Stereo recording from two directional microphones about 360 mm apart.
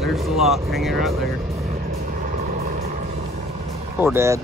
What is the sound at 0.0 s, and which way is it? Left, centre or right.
Speech, centre.